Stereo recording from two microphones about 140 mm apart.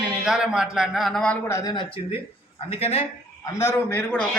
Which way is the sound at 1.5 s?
20° left (ahead or behind).